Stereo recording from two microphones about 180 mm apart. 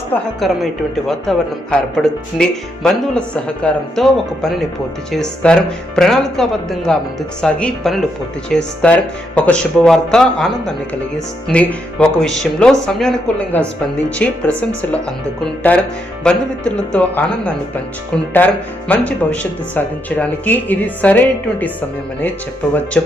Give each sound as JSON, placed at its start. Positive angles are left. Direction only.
{"t": 0.1, "sound": "speech", "side_deg": 0}
{"t": 15.7, "sound": "speech", "side_deg": 10}